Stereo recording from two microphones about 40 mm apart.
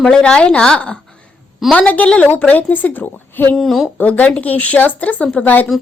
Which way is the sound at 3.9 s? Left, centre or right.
Left.